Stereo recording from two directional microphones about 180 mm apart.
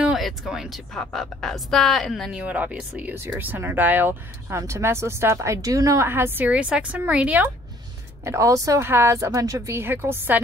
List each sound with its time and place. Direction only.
0.0 s a woman's voice: centre (ahead or behind)